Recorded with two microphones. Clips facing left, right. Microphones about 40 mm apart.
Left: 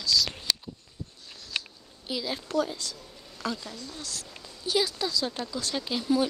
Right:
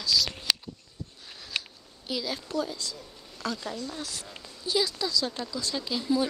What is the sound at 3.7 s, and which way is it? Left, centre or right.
Speech, centre.